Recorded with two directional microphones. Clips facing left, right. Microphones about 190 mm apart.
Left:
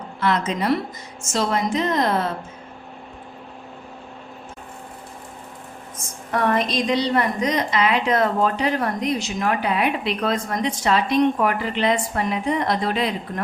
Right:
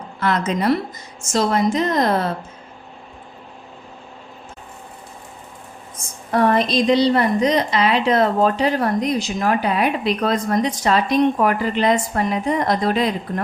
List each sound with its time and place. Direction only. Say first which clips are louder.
0.2 s a woman's voice: right 2 dB; 45° right (ahead or behind)
6.3 s a woman's voice: right 4 dB; 35° right (ahead or behind)